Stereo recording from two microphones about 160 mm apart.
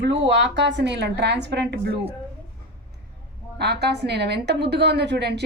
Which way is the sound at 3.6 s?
90° right.